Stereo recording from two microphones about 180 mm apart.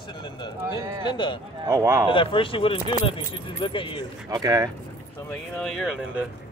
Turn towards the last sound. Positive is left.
turn(degrees=0)  # may be behind; listen again after turning